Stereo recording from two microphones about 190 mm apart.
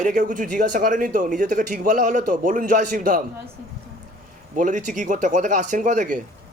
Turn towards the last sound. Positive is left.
turn(degrees=-45)  # may be behind; listen again after turning